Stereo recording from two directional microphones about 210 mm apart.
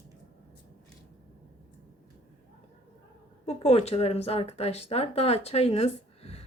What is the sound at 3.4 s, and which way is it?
A woman's voice, 30° left (ahead or behind).